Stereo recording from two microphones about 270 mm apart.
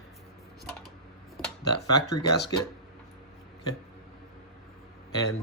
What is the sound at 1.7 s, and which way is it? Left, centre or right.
Speech, left.